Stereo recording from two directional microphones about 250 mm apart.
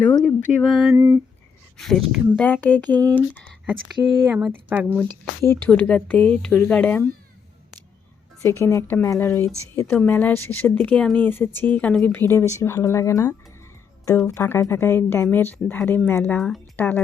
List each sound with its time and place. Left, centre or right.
0.0 s a woman's voice: centre
0.9 s a sound: centre
1.8 s speech: centre
3.0 s a sound: centre
3.3 s speech: centre
5.0 s speech: centre
8.4 s a woman's voice: centre